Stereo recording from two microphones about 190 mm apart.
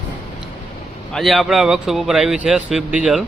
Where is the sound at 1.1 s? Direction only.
Centre (ahead or behind).